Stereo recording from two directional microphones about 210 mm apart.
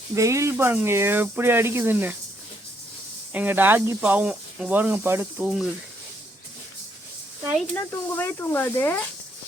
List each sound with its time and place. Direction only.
0.1 s speech: 15° right (ahead or behind)
3.3 s speech: 10° right (ahead or behind)
7.9 s speech: 10° left (ahead or behind)